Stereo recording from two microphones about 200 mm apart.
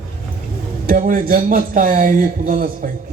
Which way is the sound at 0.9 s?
45° right (ahead or behind).